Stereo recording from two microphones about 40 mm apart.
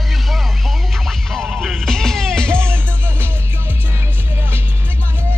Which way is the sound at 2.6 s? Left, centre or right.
Right.